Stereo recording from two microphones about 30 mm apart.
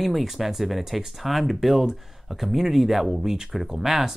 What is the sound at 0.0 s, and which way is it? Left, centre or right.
A man's voice, centre.